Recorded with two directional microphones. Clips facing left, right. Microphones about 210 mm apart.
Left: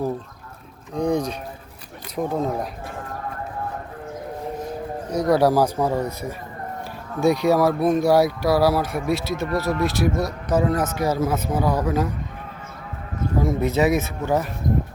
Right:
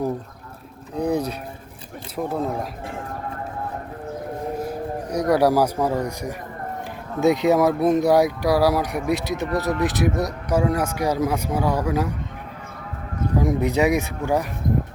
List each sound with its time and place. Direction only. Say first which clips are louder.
0.9 s speech: left 1 dB; 5° right (ahead or behind)
5.0 s speech: even; 10° right (ahead or behind)
13.4 s speech: even; 15° right (ahead or behind)